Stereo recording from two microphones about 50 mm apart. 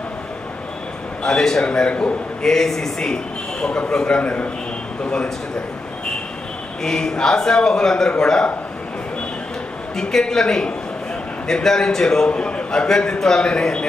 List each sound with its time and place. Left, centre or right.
1.2 s a man's voice: centre
2.4 s a man's voice: centre
4.2 s a man's voice: left
6.8 s a man's voice: centre
9.9 s a man's voice: centre
12.3 s a man's voice: left